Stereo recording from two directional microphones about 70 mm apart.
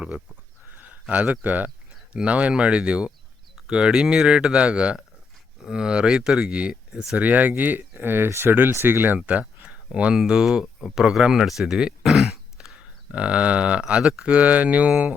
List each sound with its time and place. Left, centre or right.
0.9 s speech: centre
7.2 s speech: right
9.6 s a sound: centre
10.2 s speech: centre
13.1 s speech: centre